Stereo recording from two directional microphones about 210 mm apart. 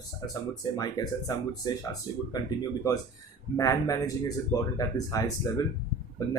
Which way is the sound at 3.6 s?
15° left (ahead or behind).